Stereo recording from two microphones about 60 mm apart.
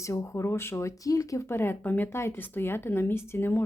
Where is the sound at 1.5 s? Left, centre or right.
Left.